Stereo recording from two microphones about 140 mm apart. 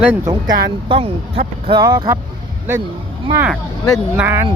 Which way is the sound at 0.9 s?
40° right (ahead or behind).